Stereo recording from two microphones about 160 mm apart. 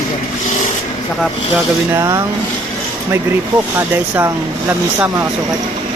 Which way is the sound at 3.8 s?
15° right (ahead or behind).